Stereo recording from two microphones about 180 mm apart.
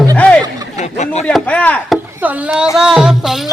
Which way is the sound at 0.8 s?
40° left (ahead or behind).